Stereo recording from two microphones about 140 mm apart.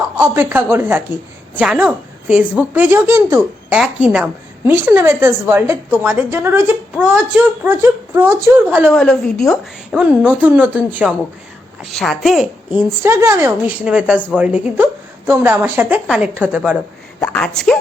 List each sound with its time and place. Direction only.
0.2 s a woman's voice: 15° right (ahead or behind)
3.7 s a woman's voice: 10° right (ahead or behind)
9.0 s a woman's voice: 5° left (ahead or behind)
9.9 s a woman's voice: 10° right (ahead or behind)
11.8 s a woman's voice: centre (ahead or behind)
12.7 s a woman's voice: 15° right (ahead or behind)
13.8 s a woman's voice: 5° right (ahead or behind)
17.2 s a woman's voice: 10° left (ahead or behind)